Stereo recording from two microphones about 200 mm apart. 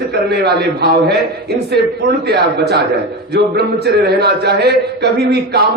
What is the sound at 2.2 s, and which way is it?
A man's voice, 55° right (ahead or behind).